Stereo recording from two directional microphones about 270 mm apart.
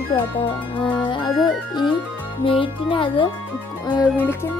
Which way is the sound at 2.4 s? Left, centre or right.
Centre.